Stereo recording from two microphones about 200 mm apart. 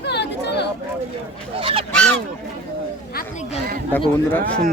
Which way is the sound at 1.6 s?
25° right (ahead or behind).